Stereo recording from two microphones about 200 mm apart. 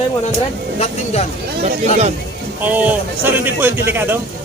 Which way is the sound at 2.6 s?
10° right (ahead or behind).